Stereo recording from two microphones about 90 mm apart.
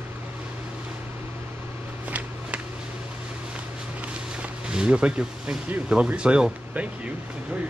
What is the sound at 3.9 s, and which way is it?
Speech, 15° right (ahead or behind).